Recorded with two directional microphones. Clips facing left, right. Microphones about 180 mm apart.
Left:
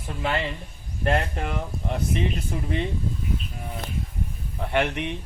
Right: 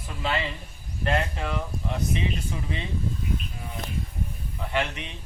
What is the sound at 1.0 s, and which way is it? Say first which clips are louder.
Speech: left 2 dB; 50° left (ahead or behind).